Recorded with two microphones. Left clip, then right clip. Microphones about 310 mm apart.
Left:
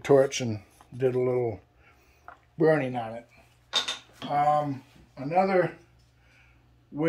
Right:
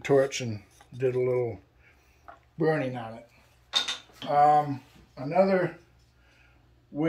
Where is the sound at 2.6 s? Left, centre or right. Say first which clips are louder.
Left 4 dB; centre.